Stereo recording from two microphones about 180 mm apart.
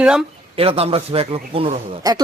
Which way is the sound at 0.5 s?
30° right (ahead or behind).